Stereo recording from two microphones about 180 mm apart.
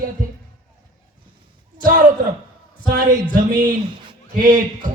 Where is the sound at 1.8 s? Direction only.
50° right (ahead or behind).